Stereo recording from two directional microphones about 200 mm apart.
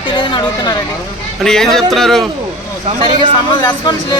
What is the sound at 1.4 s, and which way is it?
Speech, centre (ahead or behind).